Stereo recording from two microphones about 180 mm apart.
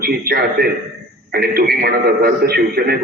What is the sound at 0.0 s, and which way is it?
A man's voice, 60° right (ahead or behind).